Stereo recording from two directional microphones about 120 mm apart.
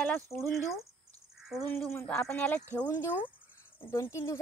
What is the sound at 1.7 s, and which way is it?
Speech, 20° left (ahead or behind).